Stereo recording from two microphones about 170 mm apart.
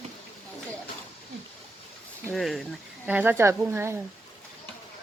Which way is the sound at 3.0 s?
10° right (ahead or behind).